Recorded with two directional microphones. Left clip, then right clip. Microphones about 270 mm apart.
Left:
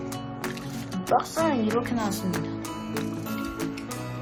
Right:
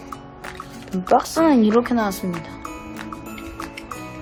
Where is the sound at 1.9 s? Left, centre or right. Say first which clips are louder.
Right 7 dB; centre.